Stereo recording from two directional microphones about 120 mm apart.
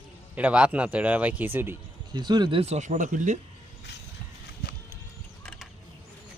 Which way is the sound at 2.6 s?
70° right (ahead or behind).